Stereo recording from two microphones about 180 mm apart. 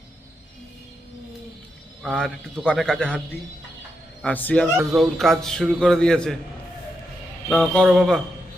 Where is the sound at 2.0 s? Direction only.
5° left (ahead or behind).